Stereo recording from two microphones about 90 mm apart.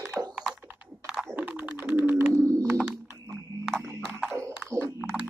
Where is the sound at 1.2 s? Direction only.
20° right (ahead or behind).